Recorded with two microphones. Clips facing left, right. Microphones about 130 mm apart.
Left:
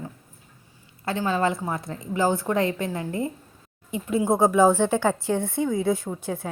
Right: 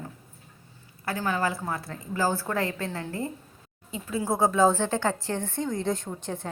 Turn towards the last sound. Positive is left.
turn(degrees=10)  # may be behind; listen again after turning